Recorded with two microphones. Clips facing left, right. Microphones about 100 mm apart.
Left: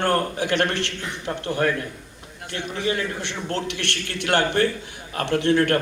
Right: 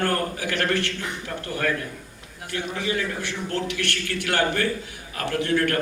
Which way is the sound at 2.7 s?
25° left (ahead or behind).